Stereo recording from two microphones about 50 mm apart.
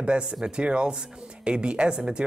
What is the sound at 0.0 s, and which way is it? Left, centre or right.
Speech, centre.